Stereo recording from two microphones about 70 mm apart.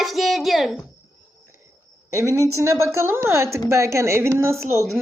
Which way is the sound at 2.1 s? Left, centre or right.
Right.